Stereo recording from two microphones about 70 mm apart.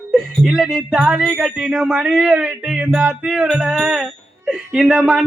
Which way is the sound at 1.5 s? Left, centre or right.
Centre.